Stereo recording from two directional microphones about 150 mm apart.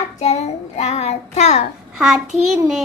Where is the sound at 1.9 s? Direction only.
5° right (ahead or behind).